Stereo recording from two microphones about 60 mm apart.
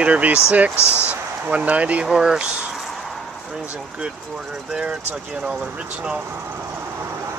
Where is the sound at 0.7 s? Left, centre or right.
Left.